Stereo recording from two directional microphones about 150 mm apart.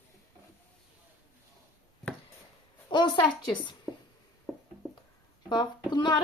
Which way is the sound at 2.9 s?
30° left (ahead or behind).